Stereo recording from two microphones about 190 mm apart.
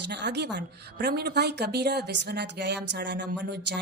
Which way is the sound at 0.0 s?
65° right (ahead or behind).